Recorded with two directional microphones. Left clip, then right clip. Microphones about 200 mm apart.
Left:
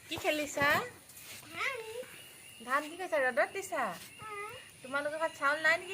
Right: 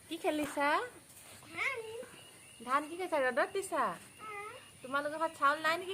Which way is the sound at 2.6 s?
60° right (ahead or behind).